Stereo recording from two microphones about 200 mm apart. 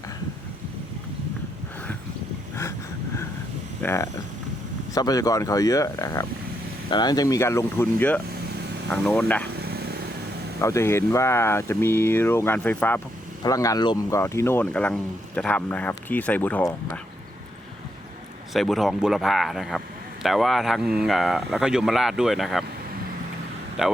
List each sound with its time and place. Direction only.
3.8 s speech: 15° left (ahead or behind)
9.6 s vehicle: 50° right (ahead or behind)
10.6 s speech: 15° left (ahead or behind)
18.5 s speech: centre (ahead or behind)
23.8 s speech: 5° right (ahead or behind)